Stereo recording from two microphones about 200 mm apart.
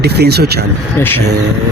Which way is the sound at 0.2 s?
55° right (ahead or behind).